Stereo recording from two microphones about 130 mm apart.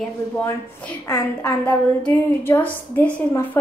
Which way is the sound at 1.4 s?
10° left (ahead or behind).